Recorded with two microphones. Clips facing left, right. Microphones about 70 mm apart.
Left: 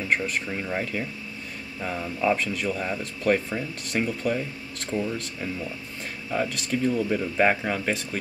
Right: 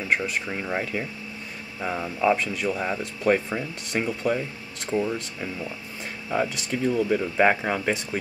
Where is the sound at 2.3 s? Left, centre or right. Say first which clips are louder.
Right 1 dB; centre.